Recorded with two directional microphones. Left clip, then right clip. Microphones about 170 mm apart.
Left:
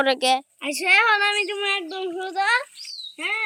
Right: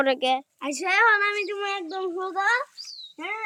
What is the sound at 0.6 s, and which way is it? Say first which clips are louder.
Speech: left 2 dB; 15° right (ahead or behind).